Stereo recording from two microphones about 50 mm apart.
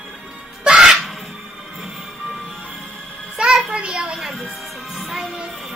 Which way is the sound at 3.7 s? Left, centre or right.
Centre.